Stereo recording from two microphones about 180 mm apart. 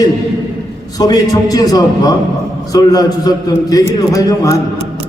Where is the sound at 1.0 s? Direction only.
20° left (ahead or behind).